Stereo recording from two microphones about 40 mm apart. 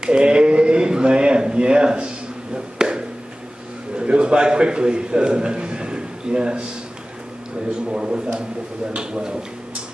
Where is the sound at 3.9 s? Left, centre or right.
Right.